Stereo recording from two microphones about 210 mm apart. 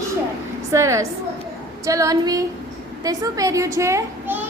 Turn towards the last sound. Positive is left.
turn(degrees=-15)  # may be behind; listen again after turning